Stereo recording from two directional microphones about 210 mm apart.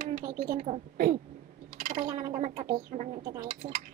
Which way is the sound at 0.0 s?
40° right (ahead or behind).